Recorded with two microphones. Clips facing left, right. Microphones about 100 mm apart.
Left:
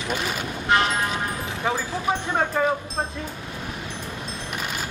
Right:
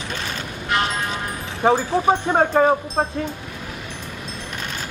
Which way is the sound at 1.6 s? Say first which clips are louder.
Right 10 dB; 40° right (ahead or behind).